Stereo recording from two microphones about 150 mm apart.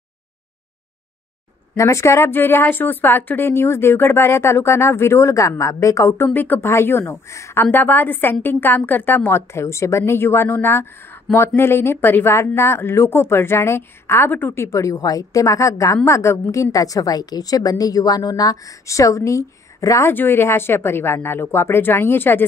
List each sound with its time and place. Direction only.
1.8 s speech: 20° left (ahead or behind)